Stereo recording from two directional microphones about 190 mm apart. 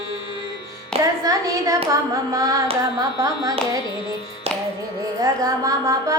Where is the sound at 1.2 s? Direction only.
15° right (ahead or behind).